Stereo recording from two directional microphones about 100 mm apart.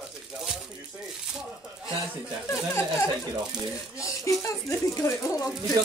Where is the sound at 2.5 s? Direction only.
30° left (ahead or behind).